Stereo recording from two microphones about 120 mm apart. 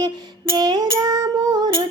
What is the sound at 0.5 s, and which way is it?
Child singing, 35° right (ahead or behind).